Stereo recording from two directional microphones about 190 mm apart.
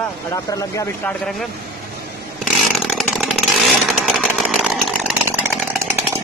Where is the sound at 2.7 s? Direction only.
Centre (ahead or behind).